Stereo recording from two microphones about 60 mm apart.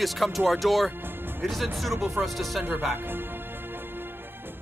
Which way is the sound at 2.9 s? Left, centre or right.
Right.